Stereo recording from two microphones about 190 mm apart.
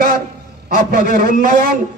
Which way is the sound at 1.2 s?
40° left (ahead or behind).